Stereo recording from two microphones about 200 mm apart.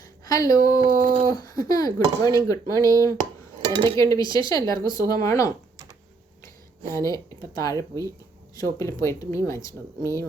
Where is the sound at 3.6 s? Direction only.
25° right (ahead or behind).